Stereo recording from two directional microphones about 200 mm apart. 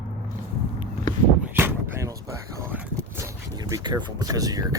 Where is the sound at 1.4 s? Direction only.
10° right (ahead or behind).